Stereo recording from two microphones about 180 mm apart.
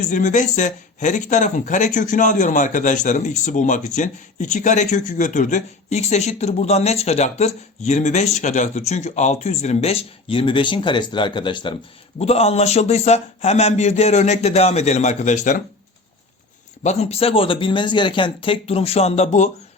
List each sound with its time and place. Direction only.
0.1 s speech: 45° left (ahead or behind)
16.8 s speech: 35° left (ahead or behind)